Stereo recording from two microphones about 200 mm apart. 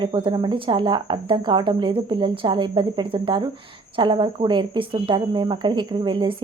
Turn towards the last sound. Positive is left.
turn(degrees=-25)  # may be behind; listen again after turning